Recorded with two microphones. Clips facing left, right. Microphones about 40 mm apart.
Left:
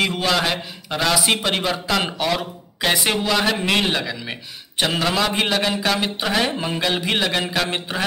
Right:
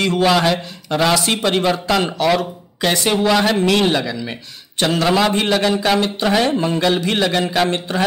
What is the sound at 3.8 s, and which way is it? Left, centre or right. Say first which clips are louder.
Speech: right 5 dB; centre.